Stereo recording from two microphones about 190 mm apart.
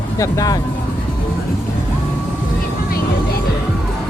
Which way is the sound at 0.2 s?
15° left (ahead or behind).